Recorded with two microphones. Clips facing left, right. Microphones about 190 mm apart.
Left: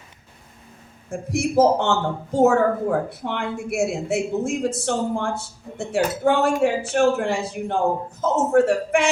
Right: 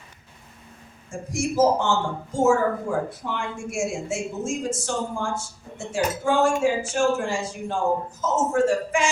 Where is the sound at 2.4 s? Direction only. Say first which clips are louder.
Left 3 dB; 60° left (ahead or behind).